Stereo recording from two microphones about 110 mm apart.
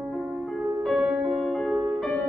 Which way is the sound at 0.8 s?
Centre (ahead or behind).